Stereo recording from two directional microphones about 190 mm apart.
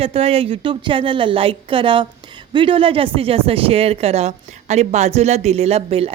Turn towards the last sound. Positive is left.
turn(degrees=-30)  # may be behind; listen again after turning